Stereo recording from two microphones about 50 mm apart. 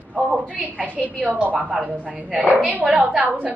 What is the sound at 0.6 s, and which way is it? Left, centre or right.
A woman's voice, right.